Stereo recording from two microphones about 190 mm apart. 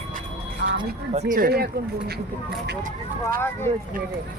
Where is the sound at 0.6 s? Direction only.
55° right (ahead or behind).